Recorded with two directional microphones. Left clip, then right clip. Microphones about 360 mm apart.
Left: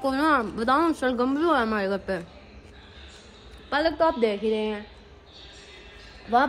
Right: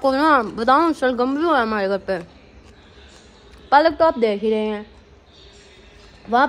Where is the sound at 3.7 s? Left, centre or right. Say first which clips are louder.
Right 8 dB; centre.